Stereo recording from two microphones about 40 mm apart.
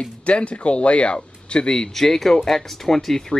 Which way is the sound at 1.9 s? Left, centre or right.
Centre.